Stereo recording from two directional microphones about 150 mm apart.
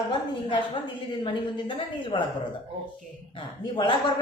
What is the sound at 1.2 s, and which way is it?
A woman's voice, 35° left (ahead or behind).